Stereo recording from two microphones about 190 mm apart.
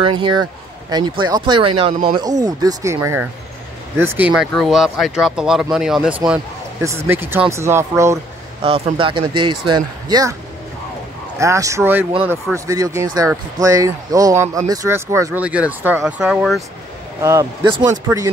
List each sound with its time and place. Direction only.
0.0 s speech: 25° right (ahead or behind)
8.6 s speech: 30° right (ahead or behind)
11.3 s speech: 15° right (ahead or behind)
17.2 s speech: 15° right (ahead or behind)